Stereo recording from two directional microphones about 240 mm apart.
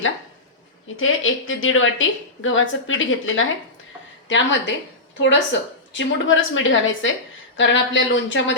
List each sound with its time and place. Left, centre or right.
0.9 s a woman's voice: left